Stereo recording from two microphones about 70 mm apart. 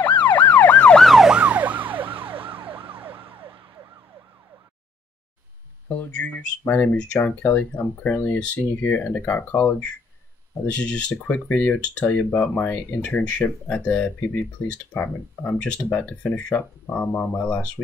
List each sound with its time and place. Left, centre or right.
0.0 s ambulance: left
1.0 s emergency vehicle: centre
1.3 s emergency vehicle: centre
5.9 s speech: centre